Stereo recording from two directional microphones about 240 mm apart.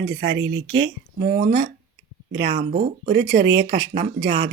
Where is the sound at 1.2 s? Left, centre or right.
Right.